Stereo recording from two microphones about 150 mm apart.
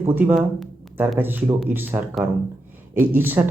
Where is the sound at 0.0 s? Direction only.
10° right (ahead or behind).